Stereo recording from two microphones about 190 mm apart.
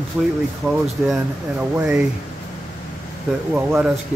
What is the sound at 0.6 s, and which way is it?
Speech, 10° right (ahead or behind).